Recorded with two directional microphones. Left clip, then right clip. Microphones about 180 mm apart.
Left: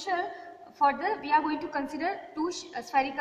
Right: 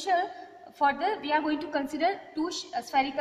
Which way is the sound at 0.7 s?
55° right (ahead or behind).